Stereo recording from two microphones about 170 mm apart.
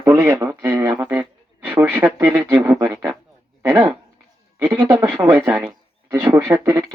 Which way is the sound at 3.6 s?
10° right (ahead or behind).